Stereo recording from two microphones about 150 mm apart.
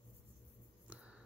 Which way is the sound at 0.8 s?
5° right (ahead or behind).